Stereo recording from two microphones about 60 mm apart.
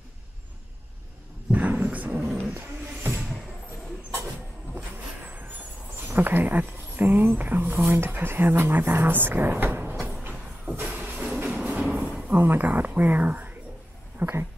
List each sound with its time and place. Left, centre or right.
1.5 s dog: right
2.5 s music: right
6.0 s speech: right
10.7 s vehicle: right
11.3 s train: right
12.3 s speech: right